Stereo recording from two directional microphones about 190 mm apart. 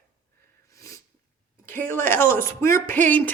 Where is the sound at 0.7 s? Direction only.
15° left (ahead or behind).